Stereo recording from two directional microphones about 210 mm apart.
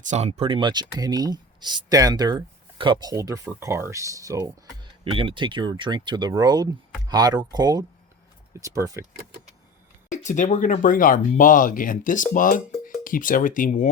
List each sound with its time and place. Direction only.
0.0 s speech: 35° right (ahead or behind); by 9.0 s 15° right (ahead or behind)
10.1 s speech: 35° left (ahead or behind)